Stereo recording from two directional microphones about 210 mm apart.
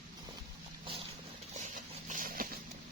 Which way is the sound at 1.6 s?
35° right (ahead or behind).